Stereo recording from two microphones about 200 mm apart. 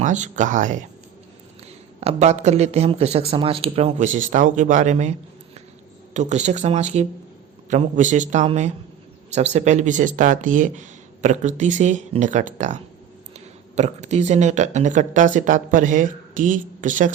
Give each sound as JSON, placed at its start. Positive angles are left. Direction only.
{"t": 0.0, "sound": "speech", "side_deg": -35}
{"t": 2.0, "sound": "speech", "side_deg": -30}
{"t": 6.1, "sound": "speech", "side_deg": -35}